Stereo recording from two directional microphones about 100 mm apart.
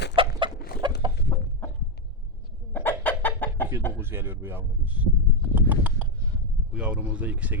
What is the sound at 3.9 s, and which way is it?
Speech, 25° right (ahead or behind).